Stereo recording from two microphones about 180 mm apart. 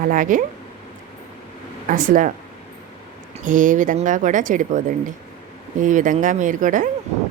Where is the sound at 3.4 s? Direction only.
45° right (ahead or behind).